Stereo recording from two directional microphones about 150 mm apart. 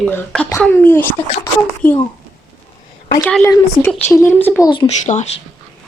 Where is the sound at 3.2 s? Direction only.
10° left (ahead or behind).